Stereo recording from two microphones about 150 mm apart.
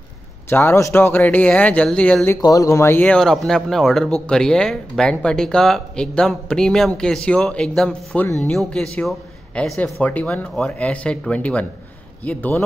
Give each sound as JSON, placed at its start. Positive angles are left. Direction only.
{"t": 0.5, "sound": "speech", "side_deg": 15}
{"t": 2.4, "sound": "speech", "side_deg": 20}